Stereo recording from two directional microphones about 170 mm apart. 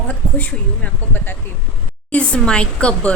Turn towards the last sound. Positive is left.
turn(degrees=5)  # may be behind; listen again after turning